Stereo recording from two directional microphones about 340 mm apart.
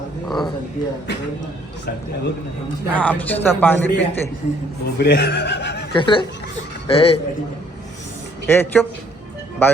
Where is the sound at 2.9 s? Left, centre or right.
Centre.